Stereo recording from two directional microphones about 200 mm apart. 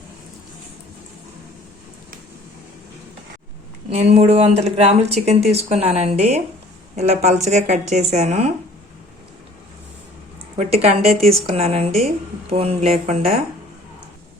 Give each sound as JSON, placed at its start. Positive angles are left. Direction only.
{"t": 3.8, "sound": "speech", "side_deg": -30}
{"t": 10.6, "sound": "speech", "side_deg": -30}
{"t": 11.1, "sound": "a woman's voice", "side_deg": 0}
{"t": 11.4, "sound": "speech", "side_deg": -30}